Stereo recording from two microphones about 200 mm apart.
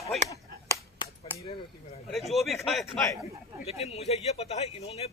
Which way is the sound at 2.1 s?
Centre (ahead or behind).